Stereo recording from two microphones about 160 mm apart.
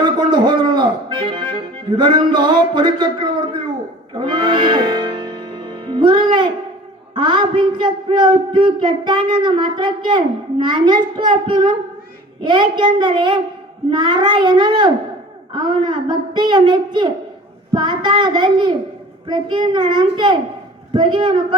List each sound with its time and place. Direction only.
0.0 s music: 30° right (ahead or behind)
7.1 s a child's voice: 30° right (ahead or behind)